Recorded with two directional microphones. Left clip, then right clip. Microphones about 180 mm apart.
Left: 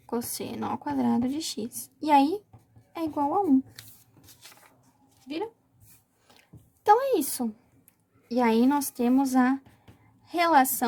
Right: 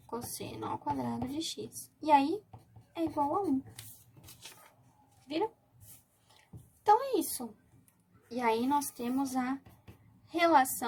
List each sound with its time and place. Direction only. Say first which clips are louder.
0.1 s a woman's voice: left 8 dB; 45° left (ahead or behind)
6.8 s a woman's voice: left 5 dB; 40° left (ahead or behind)